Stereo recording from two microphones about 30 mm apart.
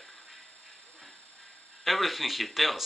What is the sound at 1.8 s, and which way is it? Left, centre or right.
Speech, centre.